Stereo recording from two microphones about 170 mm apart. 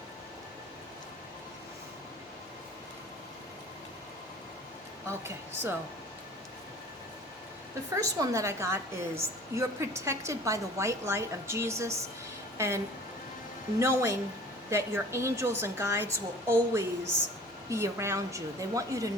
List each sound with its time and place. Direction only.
5.0 s a woman's voice: 15° right (ahead or behind)
7.9 s a woman's voice: 20° right (ahead or behind)